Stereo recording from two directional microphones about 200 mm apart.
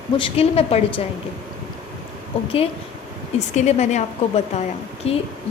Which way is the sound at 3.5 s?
35° left (ahead or behind).